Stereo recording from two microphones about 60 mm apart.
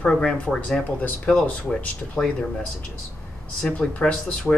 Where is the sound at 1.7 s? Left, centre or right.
Centre.